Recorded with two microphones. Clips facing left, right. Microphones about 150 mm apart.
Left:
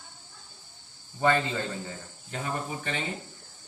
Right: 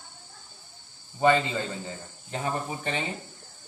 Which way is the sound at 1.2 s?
20° right (ahead or behind).